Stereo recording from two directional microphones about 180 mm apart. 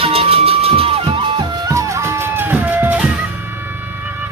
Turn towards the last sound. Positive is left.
turn(degrees=-10)  # may be behind; listen again after turning